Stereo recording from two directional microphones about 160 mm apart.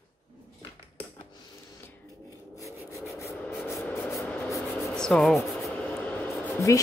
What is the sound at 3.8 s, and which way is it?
Rub, 15° left (ahead or behind).